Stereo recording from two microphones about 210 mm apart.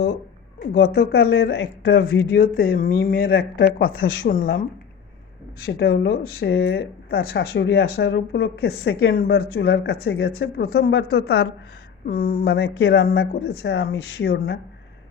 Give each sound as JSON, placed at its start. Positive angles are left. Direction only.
{"t": 0.6, "sound": "speech", "side_deg": 50}
{"t": 5.6, "sound": "speech", "side_deg": 50}
{"t": 11.2, "sound": "a woman's voice", "side_deg": 80}
{"t": 12.0, "sound": "speech", "side_deg": 45}